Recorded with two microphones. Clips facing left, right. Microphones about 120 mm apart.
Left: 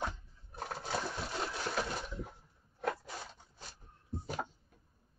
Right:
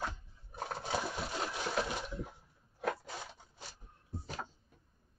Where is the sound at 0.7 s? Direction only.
5° right (ahead or behind).